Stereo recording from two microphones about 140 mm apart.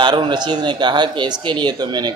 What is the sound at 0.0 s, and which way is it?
Speech, 35° right (ahead or behind).